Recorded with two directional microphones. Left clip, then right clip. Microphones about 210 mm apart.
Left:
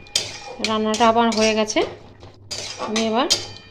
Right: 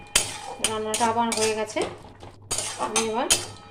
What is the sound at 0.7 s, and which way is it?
Dishes, 45° left (ahead or behind).